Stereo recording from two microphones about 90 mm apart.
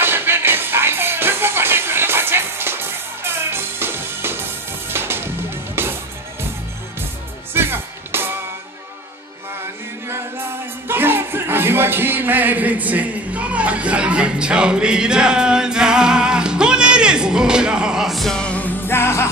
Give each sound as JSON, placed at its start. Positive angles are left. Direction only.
{"t": 0.0, "sound": "music", "side_deg": -25}
{"t": 7.5, "sound": "music", "side_deg": -25}
{"t": 10.0, "sound": "music", "side_deg": -25}